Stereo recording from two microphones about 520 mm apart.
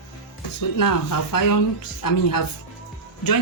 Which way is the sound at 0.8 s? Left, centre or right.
Left.